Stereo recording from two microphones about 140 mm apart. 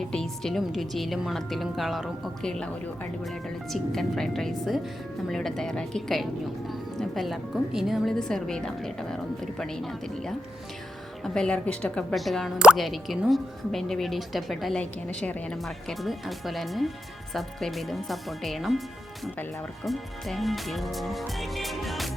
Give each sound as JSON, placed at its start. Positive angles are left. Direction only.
{"t": 0.1, "sound": "speech", "side_deg": 5}
{"t": 19.8, "sound": "speech", "side_deg": 0}